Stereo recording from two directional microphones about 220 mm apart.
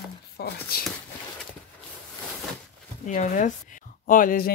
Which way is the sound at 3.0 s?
35° left (ahead or behind).